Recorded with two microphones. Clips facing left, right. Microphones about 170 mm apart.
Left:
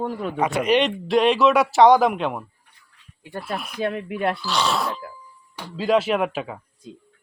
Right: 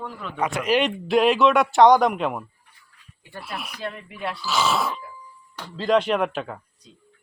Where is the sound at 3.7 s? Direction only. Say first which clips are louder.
Left 8 dB; 55° left (ahead or behind).